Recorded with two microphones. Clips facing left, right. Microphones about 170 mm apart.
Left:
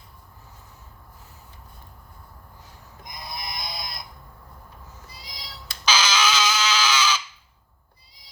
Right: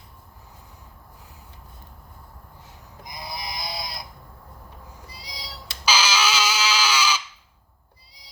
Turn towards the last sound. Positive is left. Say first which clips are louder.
# even
turn(degrees=-10)  # may be behind; listen again after turning